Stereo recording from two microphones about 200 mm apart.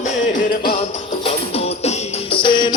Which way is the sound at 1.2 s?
30° left (ahead or behind).